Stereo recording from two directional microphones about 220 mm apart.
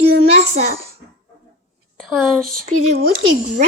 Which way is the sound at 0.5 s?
30° right (ahead or behind).